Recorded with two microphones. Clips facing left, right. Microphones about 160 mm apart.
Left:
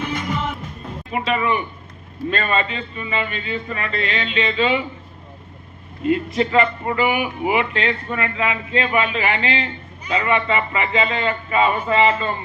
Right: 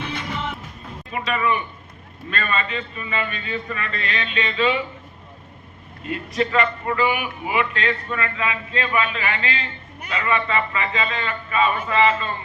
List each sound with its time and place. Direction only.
0.0 s music: 45° left (ahead or behind)
1.1 s a man's voice: 25° left (ahead or behind)
6.1 s a man's voice: 30° left (ahead or behind)